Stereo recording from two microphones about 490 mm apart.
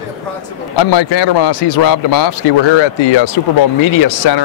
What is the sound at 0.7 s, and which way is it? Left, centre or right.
Speech, left.